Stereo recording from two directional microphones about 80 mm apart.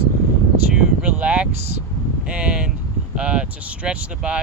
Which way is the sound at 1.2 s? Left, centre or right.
Centre.